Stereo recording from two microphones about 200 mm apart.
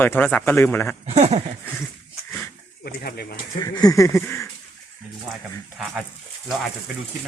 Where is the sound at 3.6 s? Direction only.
20° left (ahead or behind).